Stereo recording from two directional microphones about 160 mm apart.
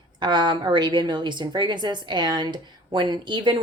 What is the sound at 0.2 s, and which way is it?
A woman's voice, 30° right (ahead or behind).